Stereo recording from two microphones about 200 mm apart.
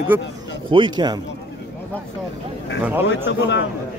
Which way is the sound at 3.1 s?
65° left (ahead or behind).